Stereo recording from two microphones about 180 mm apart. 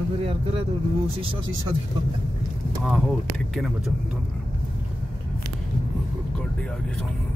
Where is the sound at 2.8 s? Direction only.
Centre (ahead or behind).